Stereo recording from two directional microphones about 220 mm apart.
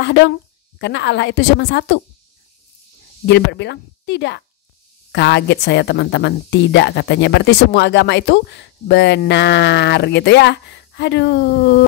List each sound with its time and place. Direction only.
0.0 s a woman's voice: 50° left (ahead or behind)
3.3 s a woman's voice: 50° left (ahead or behind)